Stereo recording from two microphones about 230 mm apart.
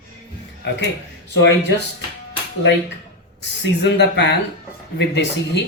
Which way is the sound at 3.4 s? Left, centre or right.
Left.